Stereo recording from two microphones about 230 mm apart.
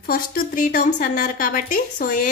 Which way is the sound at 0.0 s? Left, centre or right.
Left.